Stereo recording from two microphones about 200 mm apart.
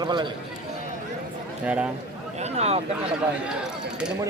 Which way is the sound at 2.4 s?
35° right (ahead or behind).